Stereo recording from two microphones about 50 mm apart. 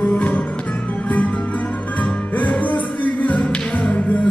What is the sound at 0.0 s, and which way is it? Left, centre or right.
Music, left.